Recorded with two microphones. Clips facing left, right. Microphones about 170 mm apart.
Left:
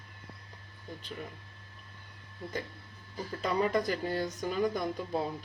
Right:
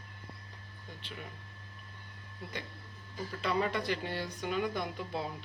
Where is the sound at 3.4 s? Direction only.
40° left (ahead or behind).